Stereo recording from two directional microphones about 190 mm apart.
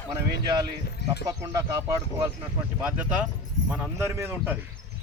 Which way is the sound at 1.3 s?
15° right (ahead or behind).